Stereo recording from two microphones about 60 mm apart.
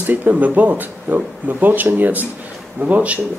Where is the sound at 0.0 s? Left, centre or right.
Right.